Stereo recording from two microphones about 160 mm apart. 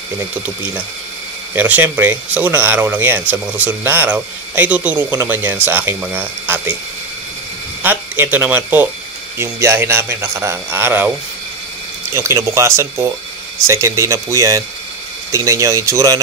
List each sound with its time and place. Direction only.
0.3 s speech: 10° right (ahead or behind)
7.8 s speech: 15° right (ahead or behind)